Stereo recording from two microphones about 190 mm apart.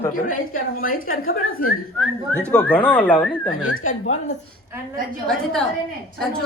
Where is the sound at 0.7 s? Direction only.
50° left (ahead or behind).